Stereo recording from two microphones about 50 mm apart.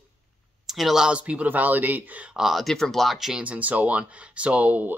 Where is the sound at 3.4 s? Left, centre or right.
Right.